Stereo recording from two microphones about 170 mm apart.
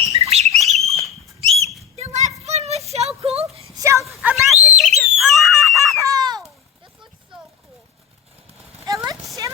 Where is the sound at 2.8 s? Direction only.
40° right (ahead or behind).